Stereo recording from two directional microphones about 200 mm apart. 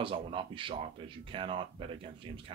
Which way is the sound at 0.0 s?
25° right (ahead or behind).